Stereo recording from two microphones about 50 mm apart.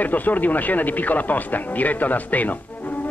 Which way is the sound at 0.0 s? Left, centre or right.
Left.